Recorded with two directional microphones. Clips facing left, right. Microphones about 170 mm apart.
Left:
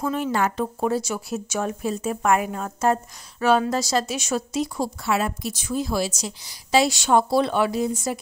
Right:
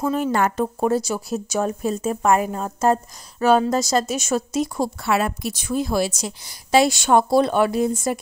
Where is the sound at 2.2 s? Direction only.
35° right (ahead or behind).